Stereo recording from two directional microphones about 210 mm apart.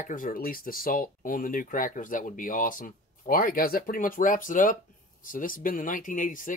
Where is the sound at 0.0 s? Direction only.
40° left (ahead or behind).